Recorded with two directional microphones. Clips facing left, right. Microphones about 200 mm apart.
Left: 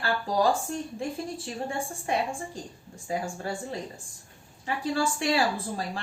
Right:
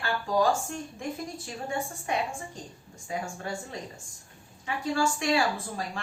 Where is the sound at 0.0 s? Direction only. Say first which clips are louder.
Left 1 dB; 35° left (ahead or behind).